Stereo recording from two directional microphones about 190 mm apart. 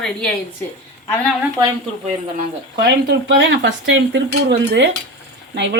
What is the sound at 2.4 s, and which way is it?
Speech, 55° right (ahead or behind).